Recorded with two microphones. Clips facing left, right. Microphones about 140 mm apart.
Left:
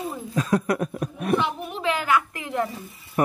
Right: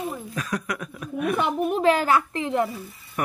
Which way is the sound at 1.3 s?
45° right (ahead or behind).